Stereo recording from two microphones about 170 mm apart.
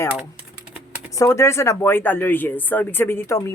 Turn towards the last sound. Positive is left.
turn(degrees=15)  # may be behind; listen again after turning